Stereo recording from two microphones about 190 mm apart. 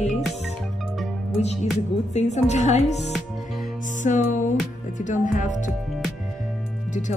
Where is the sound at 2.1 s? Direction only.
35° left (ahead or behind).